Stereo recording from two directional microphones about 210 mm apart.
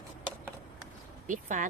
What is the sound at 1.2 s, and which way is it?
Speech, 40° right (ahead or behind).